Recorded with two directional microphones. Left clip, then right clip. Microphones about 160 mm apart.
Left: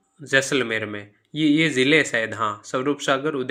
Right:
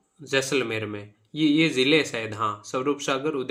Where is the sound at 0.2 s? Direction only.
20° left (ahead or behind).